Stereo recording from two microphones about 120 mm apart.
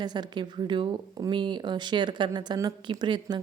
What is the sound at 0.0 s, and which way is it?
Speech, 35° right (ahead or behind).